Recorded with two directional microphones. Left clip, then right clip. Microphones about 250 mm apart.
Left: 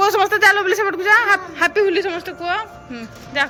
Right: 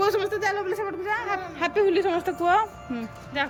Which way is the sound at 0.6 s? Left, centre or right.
Left.